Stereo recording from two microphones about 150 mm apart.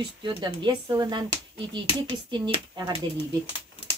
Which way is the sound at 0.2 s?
30° right (ahead or behind).